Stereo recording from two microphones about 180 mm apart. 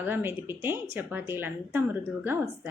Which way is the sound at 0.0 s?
10° right (ahead or behind).